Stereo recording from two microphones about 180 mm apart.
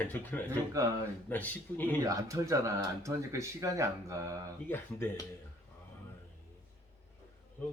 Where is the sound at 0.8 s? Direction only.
20° right (ahead or behind).